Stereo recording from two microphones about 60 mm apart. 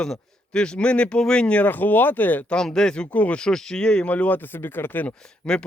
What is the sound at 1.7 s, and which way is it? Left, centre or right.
Speech, left.